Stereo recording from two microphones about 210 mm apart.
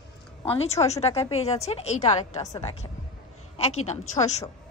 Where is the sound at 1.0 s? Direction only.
30° left (ahead or behind).